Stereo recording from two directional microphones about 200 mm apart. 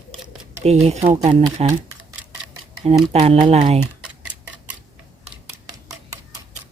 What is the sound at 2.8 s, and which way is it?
Speech, 30° right (ahead or behind).